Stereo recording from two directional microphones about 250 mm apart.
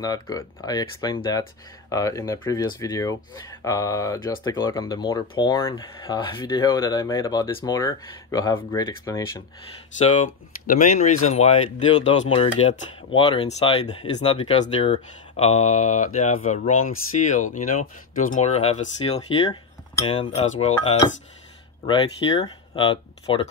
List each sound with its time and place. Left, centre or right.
0.0 s speech: centre
9.9 s speech: left